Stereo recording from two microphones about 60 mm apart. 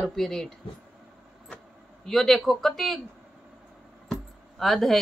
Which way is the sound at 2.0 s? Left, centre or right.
Centre.